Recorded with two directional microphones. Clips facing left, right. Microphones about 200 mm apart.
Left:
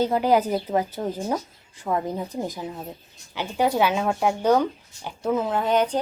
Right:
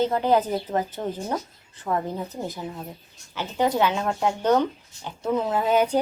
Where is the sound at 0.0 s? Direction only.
10° left (ahead or behind).